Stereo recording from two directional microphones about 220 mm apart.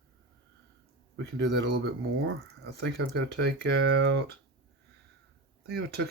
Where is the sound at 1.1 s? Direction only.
55° right (ahead or behind).